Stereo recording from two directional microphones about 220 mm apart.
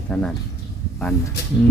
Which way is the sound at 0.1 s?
5° left (ahead or behind).